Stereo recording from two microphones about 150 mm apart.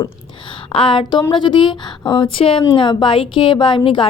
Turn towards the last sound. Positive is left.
turn(degrees=35)  # may be behind; listen again after turning